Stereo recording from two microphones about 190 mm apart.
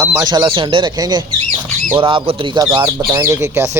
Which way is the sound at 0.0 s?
15° right (ahead or behind).